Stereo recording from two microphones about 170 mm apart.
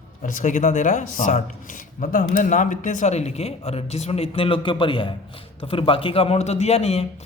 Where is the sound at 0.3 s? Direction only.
45° left (ahead or behind).